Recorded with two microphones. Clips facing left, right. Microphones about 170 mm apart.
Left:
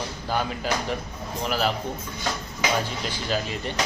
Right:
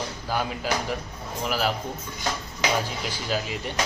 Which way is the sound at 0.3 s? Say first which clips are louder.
Left 1 dB; 5° right (ahead or behind).